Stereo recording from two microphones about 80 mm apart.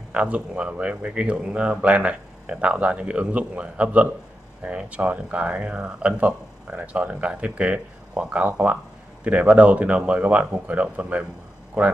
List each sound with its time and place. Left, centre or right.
0.1 s speech: centre